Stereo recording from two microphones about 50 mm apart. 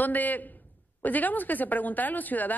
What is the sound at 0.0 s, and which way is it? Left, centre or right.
Speech, left.